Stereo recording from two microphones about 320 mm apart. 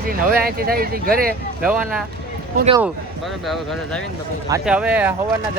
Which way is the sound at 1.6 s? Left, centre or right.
Centre.